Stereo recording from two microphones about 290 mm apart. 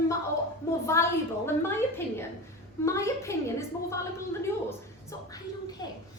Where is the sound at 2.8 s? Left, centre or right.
Centre.